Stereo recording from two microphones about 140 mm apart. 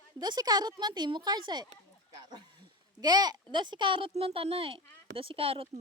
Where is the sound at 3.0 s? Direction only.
30° right (ahead or behind).